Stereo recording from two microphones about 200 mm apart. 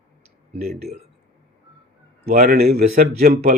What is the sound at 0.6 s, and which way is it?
Speech, 50° right (ahead or behind).